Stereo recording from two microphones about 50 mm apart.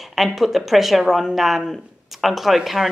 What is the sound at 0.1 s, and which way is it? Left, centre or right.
Speech, centre.